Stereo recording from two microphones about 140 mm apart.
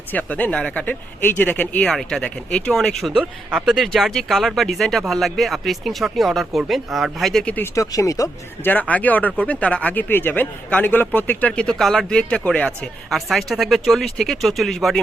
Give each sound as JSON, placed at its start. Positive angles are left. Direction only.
{"t": 0.1, "sound": "speech", "side_deg": 10}
{"t": 7.8, "sound": "speech", "side_deg": 25}
{"t": 8.7, "sound": "a man's voice", "side_deg": 10}